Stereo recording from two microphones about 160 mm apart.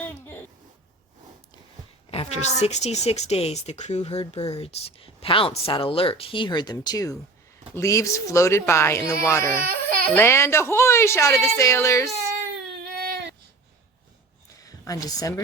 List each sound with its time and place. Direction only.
0.0 s a sound: 15° left (ahead or behind)
2.0 s a woman's voice: 40° left (ahead or behind); by 12.1 s 20° left (ahead or behind)
12.8 s baby cry: 85° right
14.6 s speech: 20° left (ahead or behind)